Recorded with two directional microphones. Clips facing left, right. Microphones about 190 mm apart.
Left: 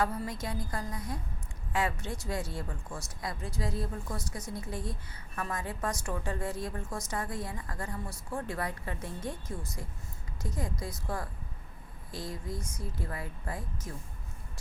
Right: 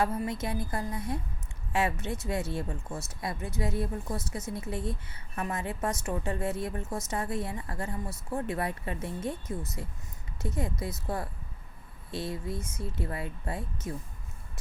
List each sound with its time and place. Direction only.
0.0 s a woman's voice: 25° right (ahead or behind)